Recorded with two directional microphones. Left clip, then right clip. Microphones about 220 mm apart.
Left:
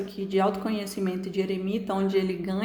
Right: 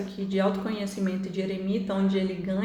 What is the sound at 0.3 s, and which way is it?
A woman's voice, 40° left (ahead or behind).